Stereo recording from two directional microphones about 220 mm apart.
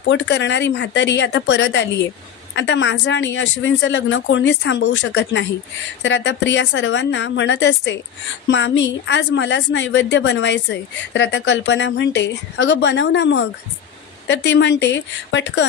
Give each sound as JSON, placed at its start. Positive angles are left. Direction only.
{"t": 0.1, "sound": "a woman's voice", "side_deg": 55}